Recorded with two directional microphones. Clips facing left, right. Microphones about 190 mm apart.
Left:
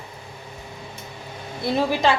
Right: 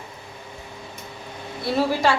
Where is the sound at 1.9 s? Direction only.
20° left (ahead or behind).